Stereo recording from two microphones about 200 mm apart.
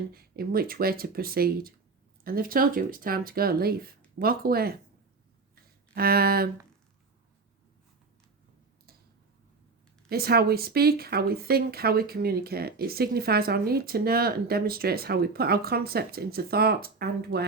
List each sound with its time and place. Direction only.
0.1 s speech: 50° right (ahead or behind)
5.9 s speech: 50° right (ahead or behind)
10.1 s speech: 50° right (ahead or behind)